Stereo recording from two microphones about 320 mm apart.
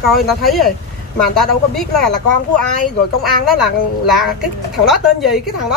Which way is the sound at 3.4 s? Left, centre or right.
Centre.